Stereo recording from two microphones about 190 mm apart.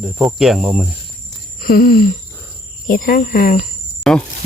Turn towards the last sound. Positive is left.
turn(degrees=5)  # may be behind; listen again after turning